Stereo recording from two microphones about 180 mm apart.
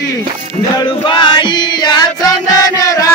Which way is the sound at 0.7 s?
25° left (ahead or behind).